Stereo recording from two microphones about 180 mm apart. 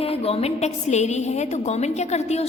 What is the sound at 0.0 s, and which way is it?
A woman's voice, 35° left (ahead or behind).